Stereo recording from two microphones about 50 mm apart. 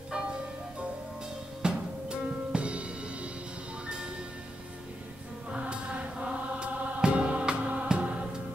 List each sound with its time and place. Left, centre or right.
0.1 s bell: centre
1.6 s music: centre
5.5 s music: right